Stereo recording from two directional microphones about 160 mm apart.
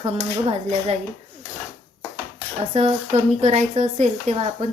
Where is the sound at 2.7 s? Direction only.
40° right (ahead or behind).